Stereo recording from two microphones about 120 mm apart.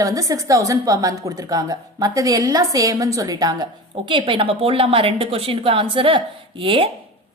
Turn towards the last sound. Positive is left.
turn(degrees=-45)  # may be behind; listen again after turning